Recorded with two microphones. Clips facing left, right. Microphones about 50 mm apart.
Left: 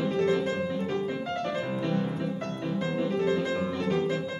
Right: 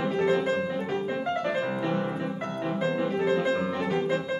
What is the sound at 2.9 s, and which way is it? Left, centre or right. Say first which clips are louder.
Music: left 1 dB; centre.